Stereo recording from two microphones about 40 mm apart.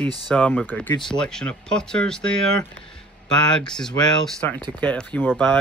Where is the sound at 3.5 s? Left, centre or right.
Centre.